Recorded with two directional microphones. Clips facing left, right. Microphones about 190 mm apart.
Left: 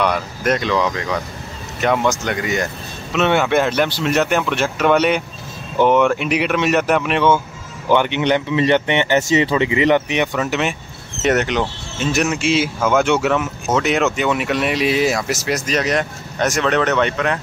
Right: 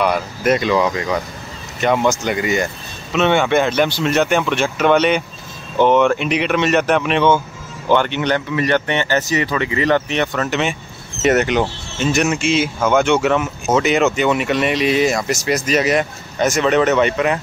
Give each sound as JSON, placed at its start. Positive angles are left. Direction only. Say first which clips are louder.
{"t": 0.0, "sound": "speech", "louder": "right 2 dB", "side_deg": -5}
{"t": 7.9, "sound": "speech", "louder": "left 1 dB", "side_deg": 15}